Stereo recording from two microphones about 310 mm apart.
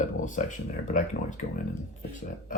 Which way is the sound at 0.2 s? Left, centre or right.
Left.